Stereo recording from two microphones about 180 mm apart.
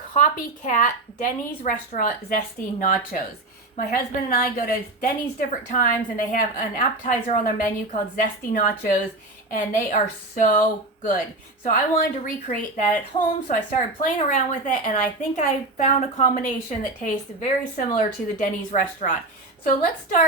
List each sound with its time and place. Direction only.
0.1 s a woman's voice: 45° left (ahead or behind)
11.6 s a woman's voice: 55° left (ahead or behind)